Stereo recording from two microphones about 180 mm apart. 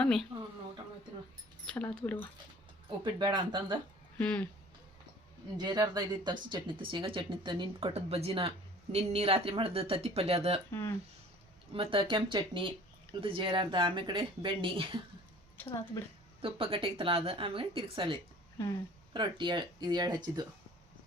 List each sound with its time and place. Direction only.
0.0 s speech: 5° left (ahead or behind)
1.6 s speech: 5° left (ahead or behind)
3.0 s speech: 25° right (ahead or behind)
4.2 s speech: 5° left (ahead or behind)
5.5 s speech: 25° right (ahead or behind)
10.7 s speech: 15° left (ahead or behind)
11.7 s speech: 30° right (ahead or behind)
15.5 s speech: 15° left (ahead or behind)
16.4 s speech: 30° right (ahead or behind)